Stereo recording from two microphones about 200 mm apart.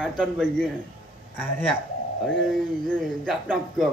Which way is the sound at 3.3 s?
Centre (ahead or behind).